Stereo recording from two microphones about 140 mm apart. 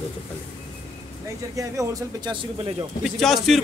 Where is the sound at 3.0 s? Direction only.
Centre (ahead or behind).